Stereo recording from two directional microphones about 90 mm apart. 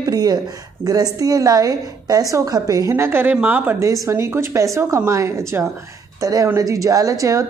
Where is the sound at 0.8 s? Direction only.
45° right (ahead or behind); by 3.7 s 20° right (ahead or behind).